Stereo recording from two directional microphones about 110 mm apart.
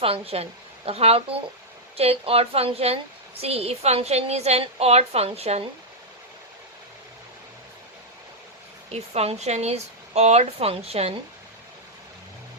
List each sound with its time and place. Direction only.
0.0 s a woman's voice: 60° right (ahead or behind)
8.9 s speech: 70° right (ahead or behind)